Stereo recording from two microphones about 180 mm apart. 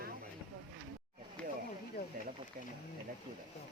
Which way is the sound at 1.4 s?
5° left (ahead or behind).